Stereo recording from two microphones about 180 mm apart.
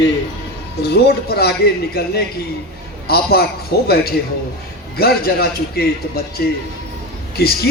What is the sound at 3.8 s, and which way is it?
Speech, 60° left (ahead or behind).